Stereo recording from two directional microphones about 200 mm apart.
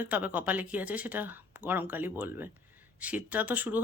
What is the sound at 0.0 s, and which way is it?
Speech, 10° right (ahead or behind).